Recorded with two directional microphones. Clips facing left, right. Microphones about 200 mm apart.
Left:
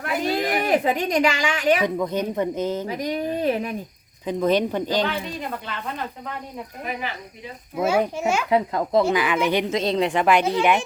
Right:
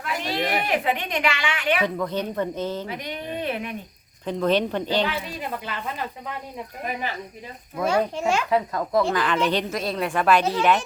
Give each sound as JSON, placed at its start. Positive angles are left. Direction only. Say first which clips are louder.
{"t": 0.2, "sound": "a woman's voice", "louder": "left 3 dB", "side_deg": 40}
{"t": 1.8, "sound": "speech", "louder": "left 2 dB", "side_deg": 15}
{"t": 2.8, "sound": "speech", "louder": "left 6 dB", "side_deg": 40}
{"t": 4.3, "sound": "speech", "louder": "left 1 dB", "side_deg": 15}
{"t": 7.8, "sound": "speech", "louder": "left 2 dB", "side_deg": 5}
{"t": 8.4, "sound": "a child's voice", "louder": "left 2 dB", "side_deg": 25}
{"t": 9.0, "sound": "speech", "louder": "left 2 dB", "side_deg": 10}